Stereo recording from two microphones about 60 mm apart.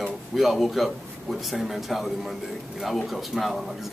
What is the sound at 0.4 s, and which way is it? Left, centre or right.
A man's voice, centre.